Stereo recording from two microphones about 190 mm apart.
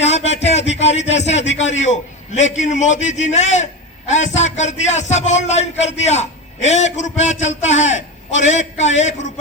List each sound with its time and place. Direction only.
0.0 s a man's voice: 35° left (ahead or behind)